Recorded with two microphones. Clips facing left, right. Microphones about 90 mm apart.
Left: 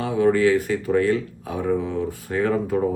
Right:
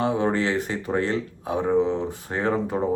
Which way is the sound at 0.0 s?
25° right (ahead or behind).